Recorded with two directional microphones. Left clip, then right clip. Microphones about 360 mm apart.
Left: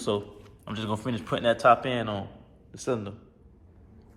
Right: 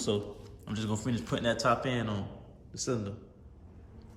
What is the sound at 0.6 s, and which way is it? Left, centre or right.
A man's voice, centre.